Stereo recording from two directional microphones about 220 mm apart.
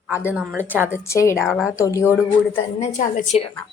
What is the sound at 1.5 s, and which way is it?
Speech, 5° right (ahead or behind).